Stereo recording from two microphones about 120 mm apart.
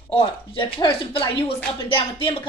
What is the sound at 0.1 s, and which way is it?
A woman's voice, 45° left (ahead or behind).